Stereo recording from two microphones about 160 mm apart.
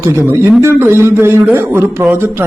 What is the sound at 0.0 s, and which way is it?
A man's voice, 15° right (ahead or behind).